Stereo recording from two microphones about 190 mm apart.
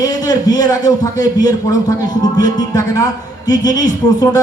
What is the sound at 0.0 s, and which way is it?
A man's voice, 20° left (ahead or behind).